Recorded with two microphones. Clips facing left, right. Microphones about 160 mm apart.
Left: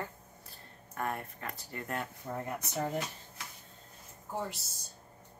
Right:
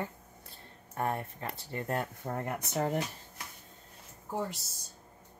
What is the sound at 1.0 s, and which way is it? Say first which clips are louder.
Speech: right 3 dB; 30° right (ahead or behind).